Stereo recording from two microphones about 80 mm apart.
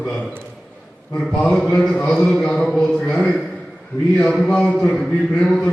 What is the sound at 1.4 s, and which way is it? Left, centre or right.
A man's voice, centre.